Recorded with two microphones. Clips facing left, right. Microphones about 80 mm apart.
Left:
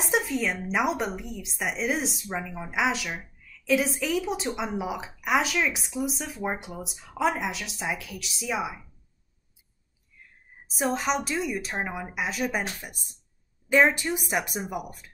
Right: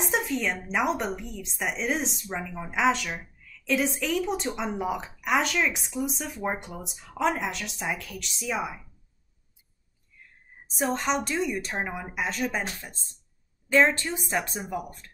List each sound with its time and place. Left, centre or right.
0.0 s a woman's voice: centre
10.7 s a woman's voice: centre
12.8 s a woman's voice: centre